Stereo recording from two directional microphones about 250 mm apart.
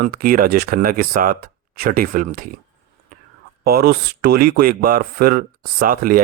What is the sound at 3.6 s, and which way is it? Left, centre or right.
Speech, right.